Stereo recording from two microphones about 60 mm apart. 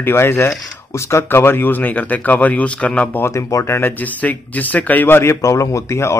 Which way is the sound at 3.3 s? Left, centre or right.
Left.